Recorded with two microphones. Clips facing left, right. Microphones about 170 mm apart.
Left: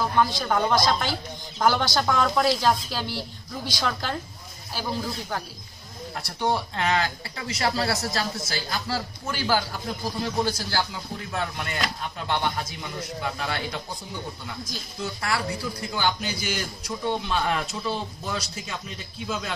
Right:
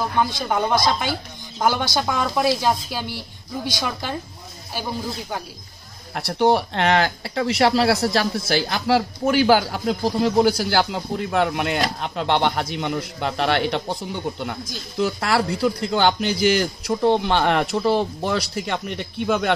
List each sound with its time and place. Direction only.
0.5 s speech: 10° right (ahead or behind)
6.1 s speech: 70° right (ahead or behind)